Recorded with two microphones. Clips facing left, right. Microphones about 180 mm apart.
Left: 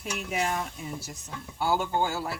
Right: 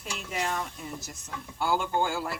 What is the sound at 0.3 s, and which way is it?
Speech, 10° left (ahead or behind).